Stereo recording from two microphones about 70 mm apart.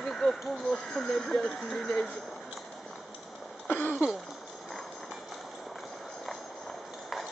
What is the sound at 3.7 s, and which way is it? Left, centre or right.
Speech, left.